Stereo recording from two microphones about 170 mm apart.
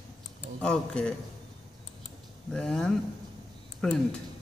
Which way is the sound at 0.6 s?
5° left (ahead or behind).